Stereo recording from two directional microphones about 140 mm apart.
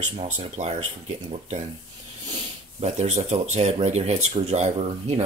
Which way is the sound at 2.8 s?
50° right (ahead or behind).